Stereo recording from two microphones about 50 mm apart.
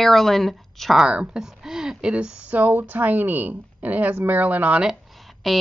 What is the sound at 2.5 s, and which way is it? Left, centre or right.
Speech, right.